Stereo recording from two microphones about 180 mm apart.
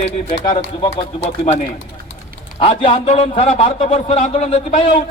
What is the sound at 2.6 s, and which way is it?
A man's voice, 30° left (ahead or behind).